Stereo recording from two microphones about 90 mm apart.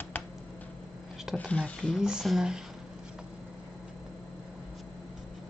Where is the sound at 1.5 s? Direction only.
10° left (ahead or behind).